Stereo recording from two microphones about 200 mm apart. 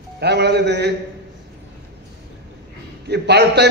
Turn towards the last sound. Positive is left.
turn(degrees=-55)  # may be behind; listen again after turning